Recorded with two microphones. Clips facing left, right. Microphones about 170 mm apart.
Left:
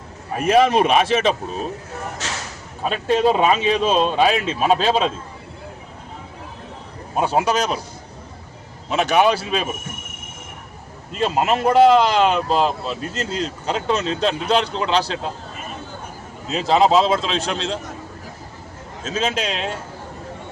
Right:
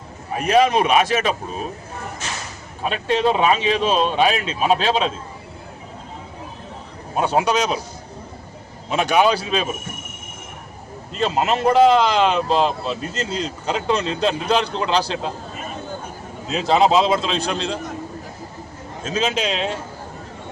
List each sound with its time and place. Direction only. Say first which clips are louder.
0.5 s speech: left 1 dB; centre (ahead or behind)
2.2 s a sound: even; 80° left
2.8 s speech: left 2 dB; centre (ahead or behind)
7.2 s speech: even; 5° left (ahead or behind)
8.9 s speech: even; centre (ahead or behind)
11.1 s speech: left 1 dB; 5° left (ahead or behind)
16.5 s speech: even; centre (ahead or behind)
19.0 s speech: right 1 dB; centre (ahead or behind)